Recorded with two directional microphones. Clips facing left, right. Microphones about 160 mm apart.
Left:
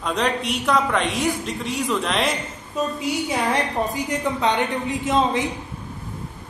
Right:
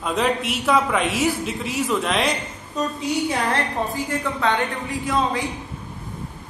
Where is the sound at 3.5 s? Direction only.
20° left (ahead or behind).